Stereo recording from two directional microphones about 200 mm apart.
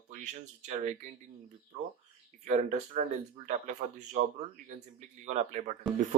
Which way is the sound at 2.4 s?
35° right (ahead or behind).